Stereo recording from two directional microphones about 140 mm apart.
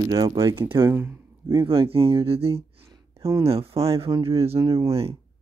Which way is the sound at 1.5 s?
35° right (ahead or behind).